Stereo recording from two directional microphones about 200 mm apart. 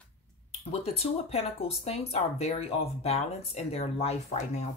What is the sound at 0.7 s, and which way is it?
Speech, 30° left (ahead or behind).